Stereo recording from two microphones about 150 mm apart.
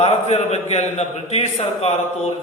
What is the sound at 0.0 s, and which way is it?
A man's voice, 45° left (ahead or behind).